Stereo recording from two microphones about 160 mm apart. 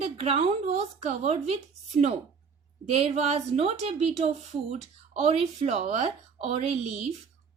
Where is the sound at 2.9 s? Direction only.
40° right (ahead or behind).